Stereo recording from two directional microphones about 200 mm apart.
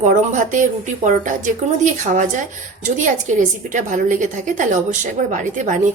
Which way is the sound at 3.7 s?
40° right (ahead or behind).